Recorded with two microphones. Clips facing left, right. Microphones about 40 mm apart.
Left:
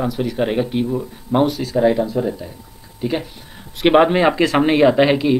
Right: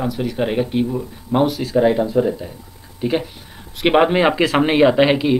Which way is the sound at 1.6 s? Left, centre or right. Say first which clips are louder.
Even; centre.